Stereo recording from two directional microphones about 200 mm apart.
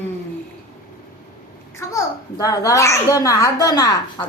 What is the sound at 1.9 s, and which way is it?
A child's voice, 15° left (ahead or behind).